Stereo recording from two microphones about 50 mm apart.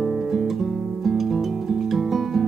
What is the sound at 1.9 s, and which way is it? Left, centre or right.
Guitar, centre.